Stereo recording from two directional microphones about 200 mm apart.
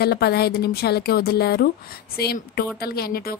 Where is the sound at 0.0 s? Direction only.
55° left (ahead or behind).